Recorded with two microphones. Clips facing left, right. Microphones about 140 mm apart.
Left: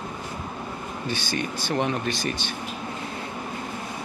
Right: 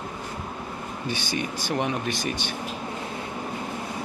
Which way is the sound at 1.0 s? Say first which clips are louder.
Even; 15° right (ahead or behind).